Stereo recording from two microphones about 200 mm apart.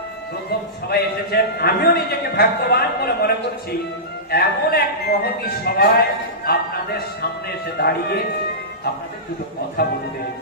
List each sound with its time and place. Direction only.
0.8 s speech: 50° left (ahead or behind)